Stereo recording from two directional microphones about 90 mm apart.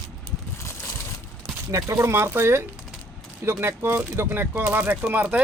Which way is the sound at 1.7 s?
35° right (ahead or behind).